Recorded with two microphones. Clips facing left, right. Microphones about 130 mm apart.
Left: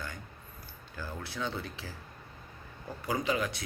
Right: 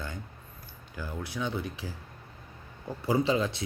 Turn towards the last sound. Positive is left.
turn(degrees=-25)  # may be behind; listen again after turning